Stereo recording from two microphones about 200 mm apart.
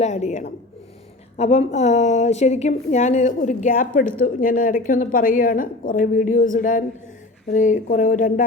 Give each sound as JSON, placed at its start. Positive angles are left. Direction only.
{"t": 0.0, "sound": "a woman's voice", "side_deg": 35}